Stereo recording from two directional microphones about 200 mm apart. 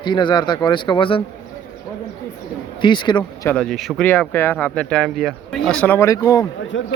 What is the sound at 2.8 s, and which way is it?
Speech, 25° left (ahead or behind).